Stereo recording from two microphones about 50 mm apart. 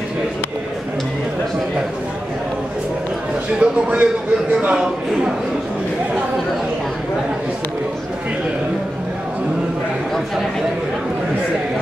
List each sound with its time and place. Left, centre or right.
3.5 s speech: right